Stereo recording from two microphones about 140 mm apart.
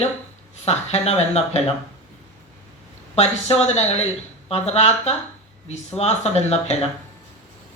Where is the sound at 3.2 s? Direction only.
50° left (ahead or behind).